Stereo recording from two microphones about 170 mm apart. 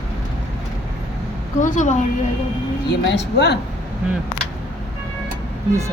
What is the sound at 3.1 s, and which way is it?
Speech, 90° left.